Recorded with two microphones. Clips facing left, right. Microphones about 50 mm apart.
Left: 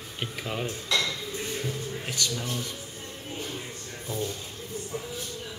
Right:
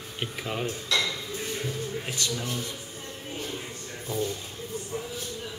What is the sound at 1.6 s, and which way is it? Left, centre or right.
Music, centre.